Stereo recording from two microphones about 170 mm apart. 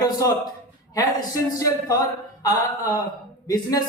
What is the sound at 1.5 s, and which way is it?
A man's voice, 20° left (ahead or behind).